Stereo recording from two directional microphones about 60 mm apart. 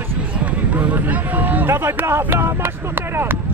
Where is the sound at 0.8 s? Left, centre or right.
Right.